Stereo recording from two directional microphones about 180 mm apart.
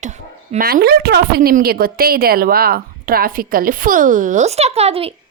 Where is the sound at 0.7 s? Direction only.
60° right (ahead or behind); by 5.1 s 35° right (ahead or behind).